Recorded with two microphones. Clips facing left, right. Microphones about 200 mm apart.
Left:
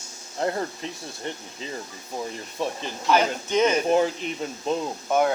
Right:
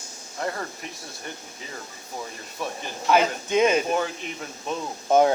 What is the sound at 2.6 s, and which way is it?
Speech, 25° left (ahead or behind).